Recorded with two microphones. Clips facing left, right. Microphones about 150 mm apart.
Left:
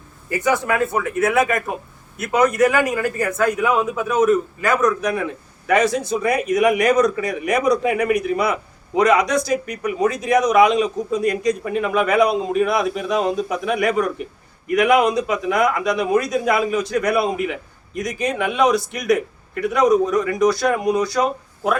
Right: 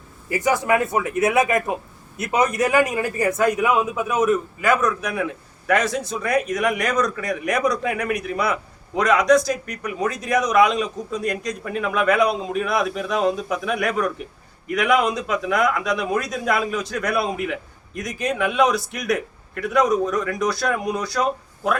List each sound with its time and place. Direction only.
0.9 s a man's voice: 20° right (ahead or behind); by 21.2 s centre (ahead or behind)